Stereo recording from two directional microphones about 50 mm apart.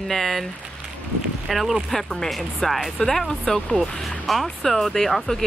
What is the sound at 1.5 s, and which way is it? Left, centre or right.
Speech, centre.